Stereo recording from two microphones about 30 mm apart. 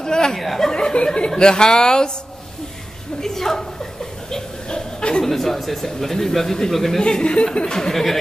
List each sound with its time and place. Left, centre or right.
0.0 s speech: left
0.4 s speech: centre
0.7 s speech: left
3.2 s chuckle: centre
5.2 s speech: centre
7.0 s speech: left
7.6 s speech: left
7.9 s speech: centre